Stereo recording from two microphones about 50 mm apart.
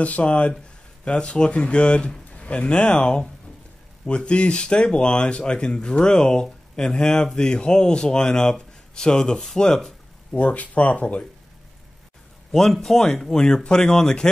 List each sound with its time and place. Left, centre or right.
0.0 s speech: left
10.3 s speech: left
12.7 s speech: centre